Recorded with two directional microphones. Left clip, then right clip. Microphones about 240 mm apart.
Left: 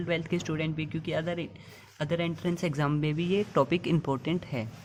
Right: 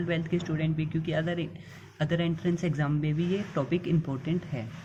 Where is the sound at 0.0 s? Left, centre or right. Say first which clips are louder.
Even; left.